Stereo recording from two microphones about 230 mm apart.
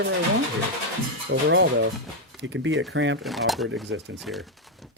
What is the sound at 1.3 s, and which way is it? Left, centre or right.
Speech, right.